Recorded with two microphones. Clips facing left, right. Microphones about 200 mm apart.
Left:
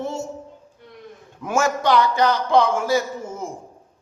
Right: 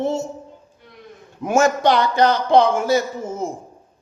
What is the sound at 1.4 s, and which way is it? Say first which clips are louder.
A man's voice: right 4 dB; 20° right (ahead or behind).